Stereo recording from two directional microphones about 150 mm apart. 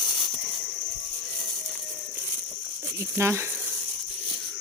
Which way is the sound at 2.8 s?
20° right (ahead or behind).